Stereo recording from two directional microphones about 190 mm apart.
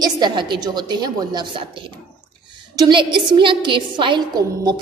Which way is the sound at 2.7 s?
25° right (ahead or behind).